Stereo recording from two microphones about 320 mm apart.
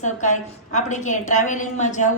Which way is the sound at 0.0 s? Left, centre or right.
Left.